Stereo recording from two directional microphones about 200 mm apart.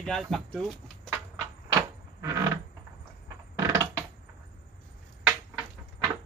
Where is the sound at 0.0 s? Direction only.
Centre (ahead or behind).